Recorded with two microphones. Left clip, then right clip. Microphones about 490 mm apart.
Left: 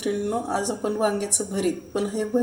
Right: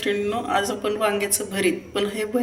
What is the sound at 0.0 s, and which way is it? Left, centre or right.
Speech, left.